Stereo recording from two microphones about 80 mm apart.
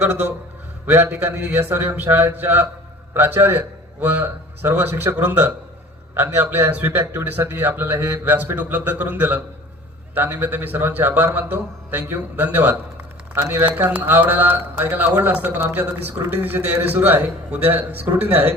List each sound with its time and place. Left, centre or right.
0.0 s a man's voice: right